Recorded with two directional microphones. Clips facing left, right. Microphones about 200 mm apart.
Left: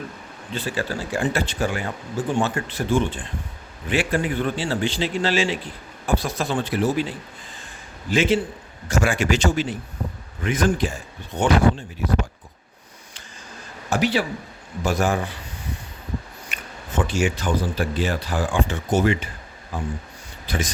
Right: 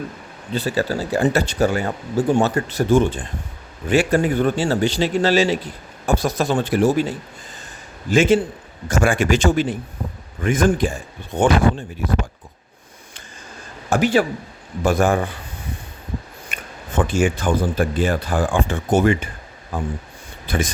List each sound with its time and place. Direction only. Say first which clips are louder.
0.5 s speech: right 5 dB; 40° right (ahead or behind)
8.1 s speech: right 5 dB; 45° right (ahead or behind)
13.9 s speech: right 4 dB; 50° right (ahead or behind)
16.5 s speech: right 2 dB; 50° right (ahead or behind)